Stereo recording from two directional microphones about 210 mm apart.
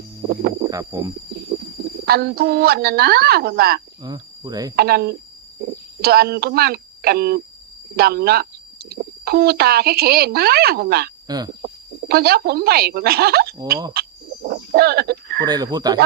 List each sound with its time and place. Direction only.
0.2 s speech: 40° right (ahead or behind)
0.7 s speech: 15° right (ahead or behind)
2.0 s speech: 50° right (ahead or behind)
4.0 s speech: 20° right (ahead or behind)
4.8 s speech: 50° right (ahead or behind)
11.3 s speech: 20° right (ahead or behind)
11.6 s speech: 50° right (ahead or behind)
14.0 s frog: 50° right (ahead or behind)
14.4 s a sound: 50° right (ahead or behind)
15.4 s speech: 20° right (ahead or behind)